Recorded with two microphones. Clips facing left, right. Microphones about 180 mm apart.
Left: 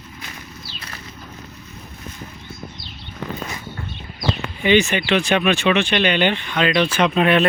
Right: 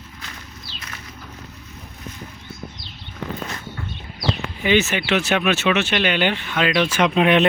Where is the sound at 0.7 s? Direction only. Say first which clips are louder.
Right 1 dB; 30° left (ahead or behind).